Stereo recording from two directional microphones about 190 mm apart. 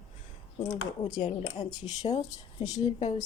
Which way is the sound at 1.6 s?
20° left (ahead or behind).